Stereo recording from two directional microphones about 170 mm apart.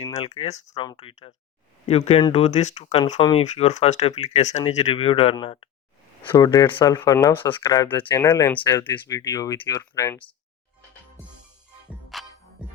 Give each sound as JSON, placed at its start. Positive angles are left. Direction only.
{"t": 0.2, "sound": "speech", "side_deg": 35}
{"t": 0.8, "sound": "speech", "side_deg": 30}
{"t": 3.2, "sound": "speech", "side_deg": 30}
{"t": 3.4, "sound": "speech", "side_deg": 40}
{"t": 8.2, "sound": "speech", "side_deg": 15}
{"t": 12.1, "sound": "music", "side_deg": 0}